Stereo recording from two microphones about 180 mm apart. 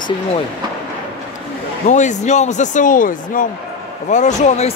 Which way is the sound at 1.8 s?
40° left (ahead or behind).